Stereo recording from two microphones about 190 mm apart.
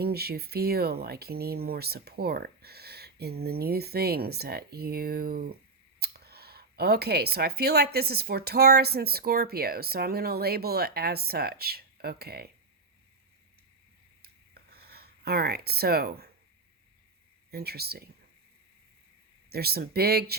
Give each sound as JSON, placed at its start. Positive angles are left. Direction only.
{"t": 0.0, "sound": "speech", "side_deg": -55}
{"t": 14.2, "sound": "a sound", "side_deg": -55}
{"t": 17.5, "sound": "speech", "side_deg": -55}
{"t": 19.5, "sound": "speech", "side_deg": -55}